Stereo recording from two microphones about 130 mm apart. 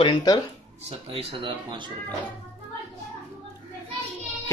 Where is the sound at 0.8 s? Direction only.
50° right (ahead or behind).